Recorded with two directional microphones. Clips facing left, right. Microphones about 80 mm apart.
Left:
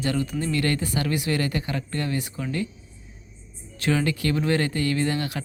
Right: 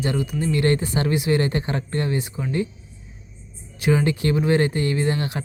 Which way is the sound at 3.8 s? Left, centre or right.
Right.